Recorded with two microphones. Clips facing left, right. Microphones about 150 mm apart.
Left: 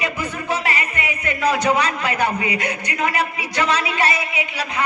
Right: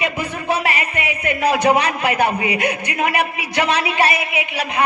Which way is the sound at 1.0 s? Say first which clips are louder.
Right 3 dB; 20° right (ahead or behind).